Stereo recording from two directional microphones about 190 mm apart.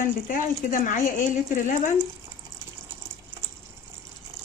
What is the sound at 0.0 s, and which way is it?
Speech, 45° left (ahead or behind).